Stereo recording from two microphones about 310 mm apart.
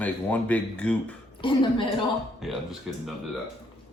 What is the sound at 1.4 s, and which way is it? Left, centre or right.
Speech, centre.